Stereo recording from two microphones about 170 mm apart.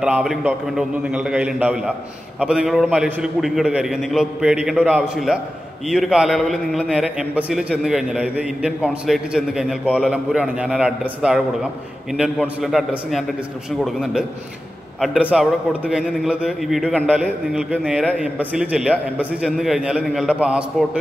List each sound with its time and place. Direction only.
0.0 s a man's voice: 5° right (ahead or behind)